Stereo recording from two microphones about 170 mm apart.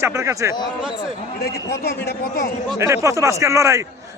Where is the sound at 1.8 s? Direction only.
75° left (ahead or behind).